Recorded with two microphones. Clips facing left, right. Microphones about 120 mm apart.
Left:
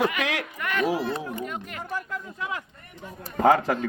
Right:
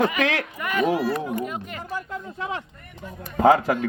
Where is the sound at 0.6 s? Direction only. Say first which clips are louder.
Right 2 dB; 5° right (ahead or behind).